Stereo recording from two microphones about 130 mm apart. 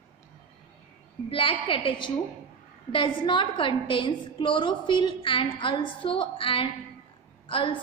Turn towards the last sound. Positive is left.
turn(degrees=40)  # may be behind; listen again after turning